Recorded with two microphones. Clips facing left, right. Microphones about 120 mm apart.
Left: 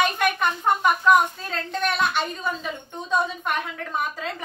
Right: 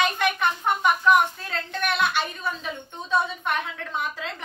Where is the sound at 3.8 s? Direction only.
10° left (ahead or behind).